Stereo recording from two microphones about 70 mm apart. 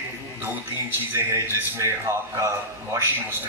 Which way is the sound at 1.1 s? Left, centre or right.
Right.